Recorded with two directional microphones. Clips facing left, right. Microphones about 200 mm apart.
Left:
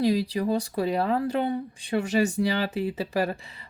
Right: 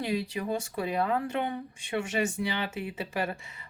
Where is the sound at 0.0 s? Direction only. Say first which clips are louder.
Left 7 dB; 35° left (ahead or behind).